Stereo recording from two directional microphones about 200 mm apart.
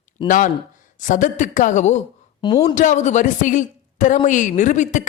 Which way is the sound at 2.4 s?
20° left (ahead or behind).